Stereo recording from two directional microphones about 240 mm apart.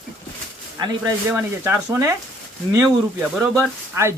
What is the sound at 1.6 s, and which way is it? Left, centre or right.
Speech, centre.